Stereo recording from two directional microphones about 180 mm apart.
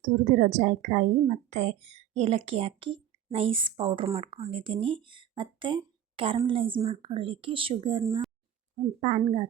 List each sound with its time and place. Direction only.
0.0 s a woman's voice: 45° right (ahead or behind); by 8.0 s 30° right (ahead or behind)
8.7 s a woman's voice: 45° right (ahead or behind)